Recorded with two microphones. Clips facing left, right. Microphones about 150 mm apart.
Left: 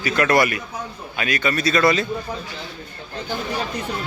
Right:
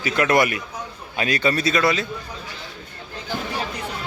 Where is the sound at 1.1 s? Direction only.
35° right (ahead or behind).